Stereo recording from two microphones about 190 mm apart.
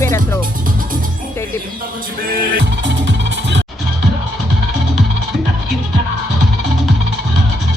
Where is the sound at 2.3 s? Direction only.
60° right (ahead or behind).